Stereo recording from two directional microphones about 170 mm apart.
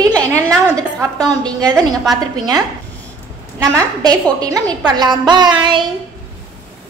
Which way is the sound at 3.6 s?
20° right (ahead or behind).